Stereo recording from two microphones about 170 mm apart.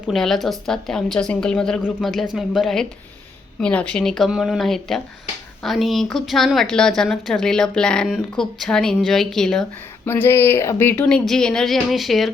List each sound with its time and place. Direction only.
0.1 s a woman's voice: centre (ahead or behind)
10.1 s speech: 15° left (ahead or behind)